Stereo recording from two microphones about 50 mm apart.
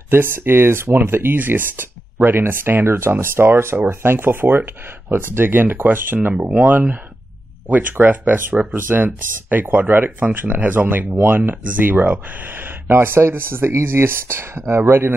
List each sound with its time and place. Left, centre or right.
0.1 s speech: right